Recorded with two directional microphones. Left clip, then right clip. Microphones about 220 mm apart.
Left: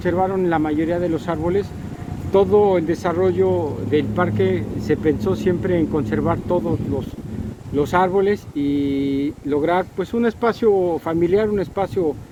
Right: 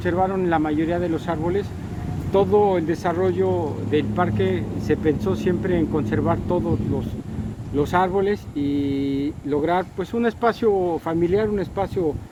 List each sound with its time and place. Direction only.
0.0 s speech: 10° left (ahead or behind)
7.8 s speech: 20° left (ahead or behind)